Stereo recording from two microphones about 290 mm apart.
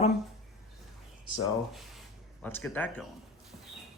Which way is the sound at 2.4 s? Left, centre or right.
Centre.